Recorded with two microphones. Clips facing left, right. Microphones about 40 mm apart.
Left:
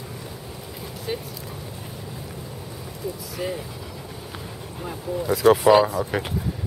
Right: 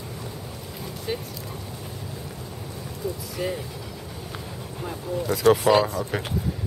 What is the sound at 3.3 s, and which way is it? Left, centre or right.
Speech, centre.